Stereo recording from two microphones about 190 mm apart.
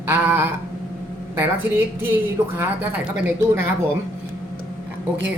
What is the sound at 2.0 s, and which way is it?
A woman's voice, 10° right (ahead or behind).